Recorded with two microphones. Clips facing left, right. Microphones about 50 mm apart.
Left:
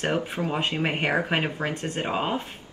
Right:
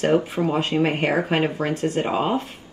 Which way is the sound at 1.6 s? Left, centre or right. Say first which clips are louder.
Right 6 dB; left.